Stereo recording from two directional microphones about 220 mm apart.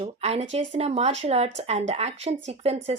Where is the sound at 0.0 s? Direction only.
30° right (ahead or behind).